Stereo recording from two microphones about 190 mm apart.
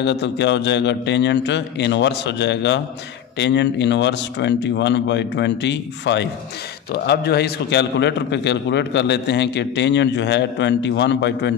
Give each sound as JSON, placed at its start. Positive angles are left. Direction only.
{"t": 0.0, "sound": "a man's voice", "side_deg": 65}